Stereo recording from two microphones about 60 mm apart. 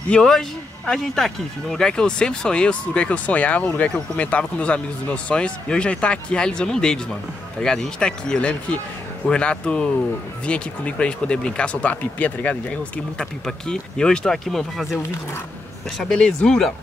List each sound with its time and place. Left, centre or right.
0.1 s speech: centre
16.0 s speech: centre